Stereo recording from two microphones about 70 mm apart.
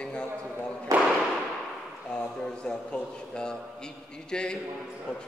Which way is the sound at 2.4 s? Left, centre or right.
Centre.